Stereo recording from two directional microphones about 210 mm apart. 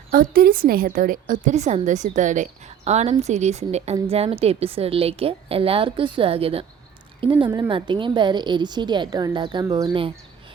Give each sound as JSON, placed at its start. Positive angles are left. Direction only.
{"t": 0.1, "sound": "a woman's voice", "side_deg": -45}